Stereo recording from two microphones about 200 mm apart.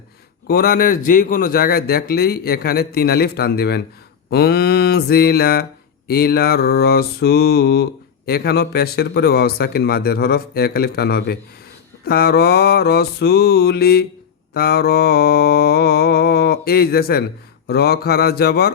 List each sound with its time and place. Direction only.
0.4 s speech: 50° left (ahead or behind)